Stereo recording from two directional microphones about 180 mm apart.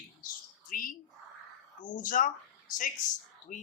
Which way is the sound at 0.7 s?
50° left (ahead or behind).